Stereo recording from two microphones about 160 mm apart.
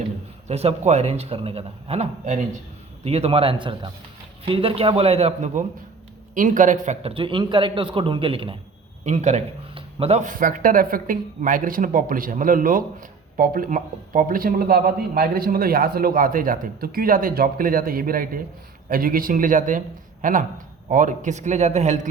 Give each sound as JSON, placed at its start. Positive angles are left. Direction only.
{"t": 0.4, "sound": "a man's voice", "side_deg": -40}
{"t": 6.3, "sound": "a man's voice", "side_deg": -55}
{"t": 9.0, "sound": "a man's voice", "side_deg": -45}